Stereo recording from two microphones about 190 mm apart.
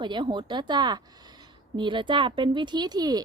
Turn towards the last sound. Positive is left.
turn(degrees=-20)  # may be behind; listen again after turning